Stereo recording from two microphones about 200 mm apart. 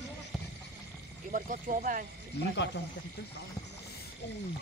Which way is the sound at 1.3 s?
40° right (ahead or behind).